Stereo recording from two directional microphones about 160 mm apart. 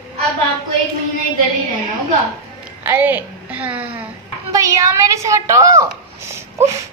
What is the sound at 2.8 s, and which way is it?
A woman's voice, 10° right (ahead or behind).